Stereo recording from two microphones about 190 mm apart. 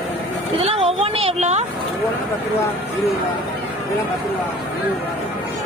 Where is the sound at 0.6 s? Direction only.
30° right (ahead or behind).